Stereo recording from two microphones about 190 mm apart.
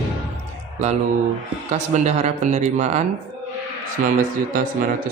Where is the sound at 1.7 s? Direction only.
40° right (ahead or behind).